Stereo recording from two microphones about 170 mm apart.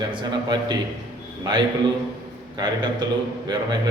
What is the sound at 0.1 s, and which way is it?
Speech, 25° right (ahead or behind).